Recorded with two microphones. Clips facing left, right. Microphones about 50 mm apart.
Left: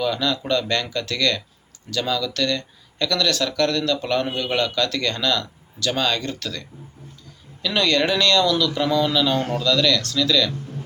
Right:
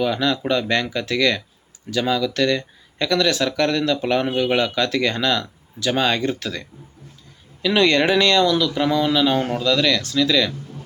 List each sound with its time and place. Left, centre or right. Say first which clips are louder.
0.0 s speech: right 2 dB; centre